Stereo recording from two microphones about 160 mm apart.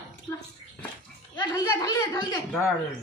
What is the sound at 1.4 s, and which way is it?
Speech, 25° left (ahead or behind).